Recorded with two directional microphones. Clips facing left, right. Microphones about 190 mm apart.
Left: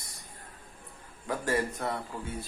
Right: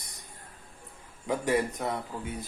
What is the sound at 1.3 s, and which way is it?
Speech, 20° right (ahead or behind).